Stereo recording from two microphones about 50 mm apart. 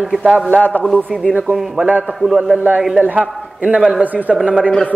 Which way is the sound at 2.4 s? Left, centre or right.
Right.